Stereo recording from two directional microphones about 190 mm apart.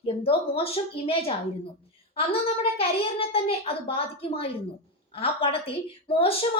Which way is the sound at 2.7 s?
30° left (ahead or behind).